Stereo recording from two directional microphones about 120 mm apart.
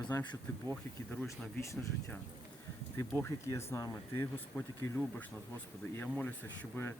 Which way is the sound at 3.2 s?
25° left (ahead or behind).